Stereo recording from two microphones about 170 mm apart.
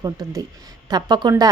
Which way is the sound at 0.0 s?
20° right (ahead or behind).